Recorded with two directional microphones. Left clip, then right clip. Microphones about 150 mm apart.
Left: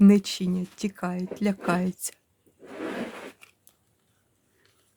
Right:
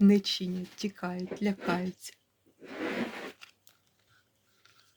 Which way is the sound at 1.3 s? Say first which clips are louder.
Left 5 dB; 50° left (ahead or behind).